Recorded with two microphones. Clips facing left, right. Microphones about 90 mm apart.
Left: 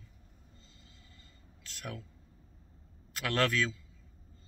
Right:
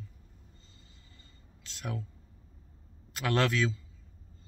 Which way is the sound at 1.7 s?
20° right (ahead or behind).